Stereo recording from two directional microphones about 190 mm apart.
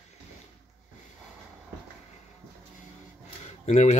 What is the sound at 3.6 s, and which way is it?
Speech, 40° left (ahead or behind).